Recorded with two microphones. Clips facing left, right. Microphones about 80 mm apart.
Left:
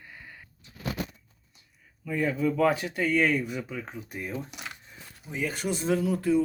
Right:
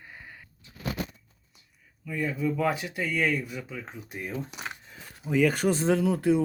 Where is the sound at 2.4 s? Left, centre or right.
Centre.